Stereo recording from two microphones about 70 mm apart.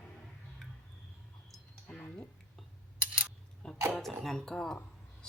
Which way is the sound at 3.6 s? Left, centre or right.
Centre.